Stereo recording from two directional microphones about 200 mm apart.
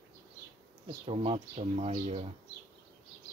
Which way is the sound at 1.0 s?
30° right (ahead or behind).